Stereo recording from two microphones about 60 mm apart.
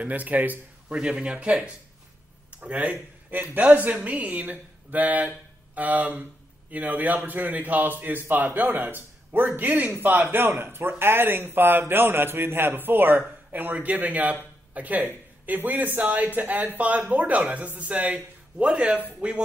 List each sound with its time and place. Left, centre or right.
0.0 s speech: right
0.9 s speech: centre